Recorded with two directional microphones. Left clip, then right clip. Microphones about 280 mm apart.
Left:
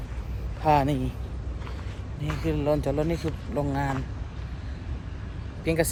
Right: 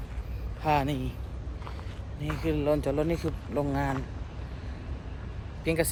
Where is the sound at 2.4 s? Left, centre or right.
Centre.